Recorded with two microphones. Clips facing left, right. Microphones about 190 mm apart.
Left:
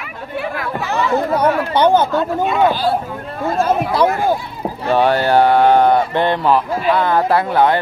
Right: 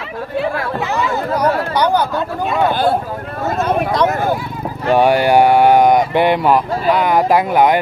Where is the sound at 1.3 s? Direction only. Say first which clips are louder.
Right 1 dB; 25° left (ahead or behind).